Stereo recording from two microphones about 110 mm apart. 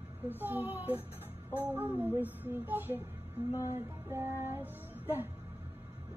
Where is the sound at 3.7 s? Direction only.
20° right (ahead or behind).